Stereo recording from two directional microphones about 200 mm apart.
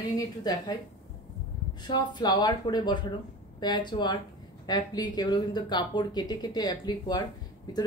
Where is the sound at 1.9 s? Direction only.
20° left (ahead or behind).